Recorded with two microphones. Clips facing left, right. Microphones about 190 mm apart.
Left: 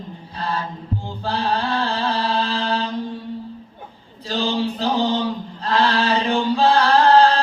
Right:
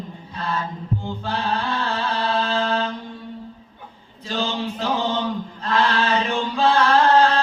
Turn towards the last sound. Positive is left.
turn(degrees=35)  # may be behind; listen again after turning